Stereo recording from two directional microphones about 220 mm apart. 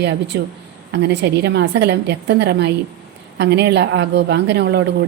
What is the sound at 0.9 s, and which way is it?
A woman's voice, 50° right (ahead or behind).